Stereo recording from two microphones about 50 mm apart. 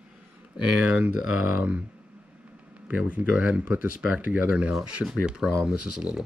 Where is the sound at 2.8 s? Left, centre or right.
Right.